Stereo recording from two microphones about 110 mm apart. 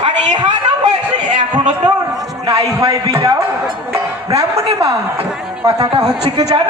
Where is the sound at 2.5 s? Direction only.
30° right (ahead or behind).